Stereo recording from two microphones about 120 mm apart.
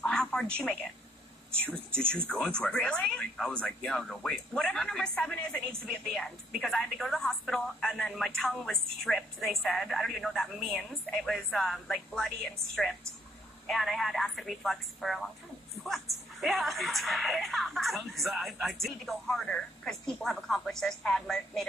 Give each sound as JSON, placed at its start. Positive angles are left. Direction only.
{"t": 0.0, "sound": "a sound", "side_deg": 5}
{"t": 1.5, "sound": "speech", "side_deg": -20}
{"t": 2.1, "sound": "speech", "side_deg": 10}
{"t": 13.7, "sound": "speech", "side_deg": 0}